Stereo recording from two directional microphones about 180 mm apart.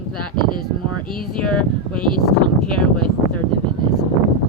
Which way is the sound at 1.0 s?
5° left (ahead or behind).